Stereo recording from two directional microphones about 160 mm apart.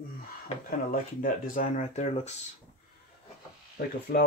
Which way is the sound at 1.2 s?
60° left (ahead or behind).